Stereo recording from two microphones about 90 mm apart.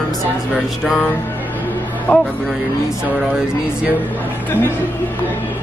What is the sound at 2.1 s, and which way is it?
Speech, 15° left (ahead or behind).